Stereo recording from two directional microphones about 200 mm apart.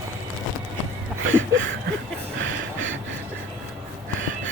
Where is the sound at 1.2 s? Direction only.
75° right (ahead or behind).